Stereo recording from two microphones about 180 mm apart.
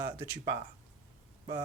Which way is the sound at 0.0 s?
15° right (ahead or behind).